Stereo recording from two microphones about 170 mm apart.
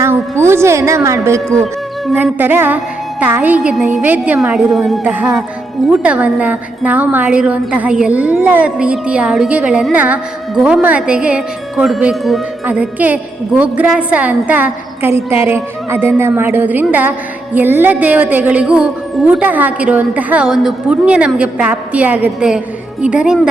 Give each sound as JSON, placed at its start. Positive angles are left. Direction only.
{"t": 0.0, "sound": "a woman's voice", "side_deg": -15}